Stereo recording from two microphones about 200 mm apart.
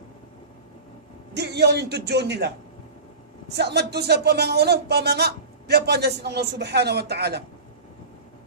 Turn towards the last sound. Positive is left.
turn(degrees=-55)  # may be behind; listen again after turning